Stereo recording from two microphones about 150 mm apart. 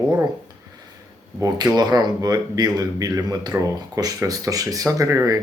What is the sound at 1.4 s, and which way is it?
Speech, 25° right (ahead or behind).